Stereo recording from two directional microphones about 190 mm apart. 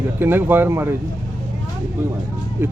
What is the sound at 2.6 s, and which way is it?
Speech, 10° right (ahead or behind).